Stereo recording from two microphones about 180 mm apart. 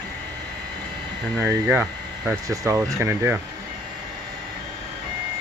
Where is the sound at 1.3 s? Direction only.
10° right (ahead or behind).